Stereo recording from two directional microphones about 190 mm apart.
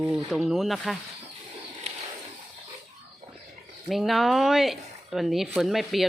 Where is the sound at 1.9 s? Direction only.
35° right (ahead or behind).